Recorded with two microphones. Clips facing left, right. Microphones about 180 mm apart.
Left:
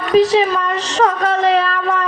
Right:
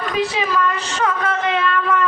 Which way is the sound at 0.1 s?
35° left (ahead or behind).